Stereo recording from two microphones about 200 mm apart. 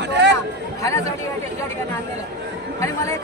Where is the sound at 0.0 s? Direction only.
60° right (ahead or behind).